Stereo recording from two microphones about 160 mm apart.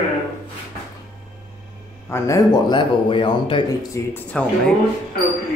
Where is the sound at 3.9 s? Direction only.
10° left (ahead or behind).